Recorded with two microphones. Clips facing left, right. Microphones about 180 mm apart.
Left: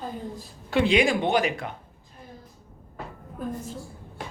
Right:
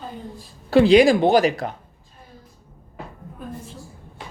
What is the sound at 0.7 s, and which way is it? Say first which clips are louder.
Speech: right 8 dB; 35° right (ahead or behind).